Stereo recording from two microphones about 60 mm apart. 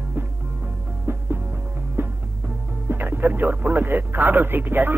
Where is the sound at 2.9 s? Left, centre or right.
Right.